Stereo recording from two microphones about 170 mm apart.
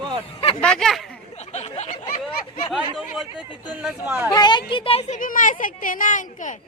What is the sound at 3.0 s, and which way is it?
Speech, 5° right (ahead or behind).